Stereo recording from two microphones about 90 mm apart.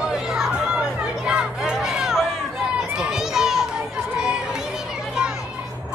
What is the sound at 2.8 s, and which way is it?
Children playing, 5° right (ahead or behind).